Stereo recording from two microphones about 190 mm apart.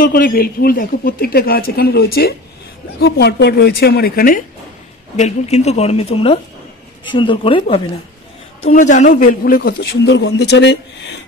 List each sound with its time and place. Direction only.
0.0 s a woman's voice: 50° left (ahead or behind)
5.1 s a woman's voice: 35° left (ahead or behind)
8.6 s a man's voice: 40° left (ahead or behind); by 11.1 s 65° left (ahead or behind)